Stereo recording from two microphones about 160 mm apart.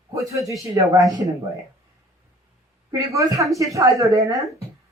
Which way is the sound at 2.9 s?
20° right (ahead or behind).